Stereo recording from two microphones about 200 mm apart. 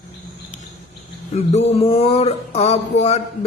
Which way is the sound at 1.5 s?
30° left (ahead or behind).